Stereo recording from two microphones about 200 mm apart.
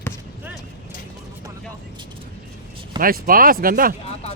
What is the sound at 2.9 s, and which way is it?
Speech, 45° right (ahead or behind).